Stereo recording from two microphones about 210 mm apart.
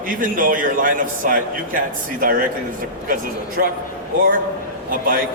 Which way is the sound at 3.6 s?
45° right (ahead or behind).